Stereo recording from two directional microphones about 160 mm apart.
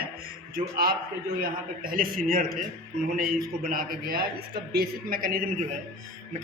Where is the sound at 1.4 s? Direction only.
60° right (ahead or behind).